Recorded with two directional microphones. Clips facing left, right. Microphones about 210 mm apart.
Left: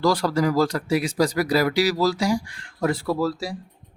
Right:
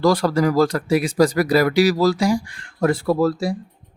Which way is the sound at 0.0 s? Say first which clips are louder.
Right 4 dB; 50° right (ahead or behind).